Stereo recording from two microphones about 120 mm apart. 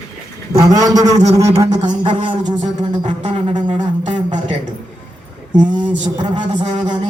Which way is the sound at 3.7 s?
80° right.